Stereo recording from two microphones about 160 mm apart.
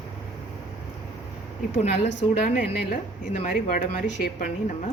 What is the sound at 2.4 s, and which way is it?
A woman's voice, 55° left (ahead or behind).